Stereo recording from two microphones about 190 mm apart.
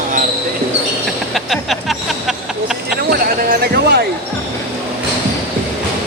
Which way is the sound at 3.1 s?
55° right (ahead or behind).